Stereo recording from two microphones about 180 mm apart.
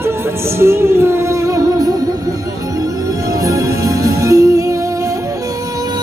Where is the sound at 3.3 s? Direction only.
20° right (ahead or behind).